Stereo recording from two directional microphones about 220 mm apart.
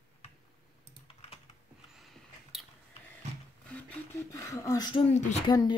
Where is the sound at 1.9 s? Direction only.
Centre (ahead or behind).